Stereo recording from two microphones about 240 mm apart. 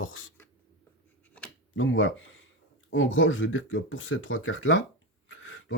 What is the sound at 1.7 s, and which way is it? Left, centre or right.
Speech, left.